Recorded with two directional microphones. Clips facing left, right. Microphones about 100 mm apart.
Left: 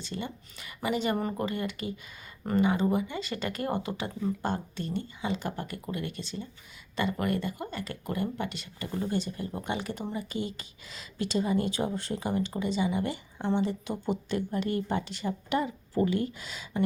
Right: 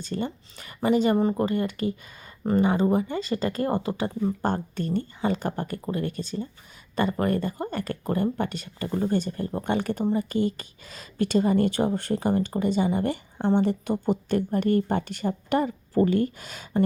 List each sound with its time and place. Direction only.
0.0 s speech: 45° right (ahead or behind)
4.4 s speech: 50° right (ahead or behind)
13.6 s speech: 55° right (ahead or behind)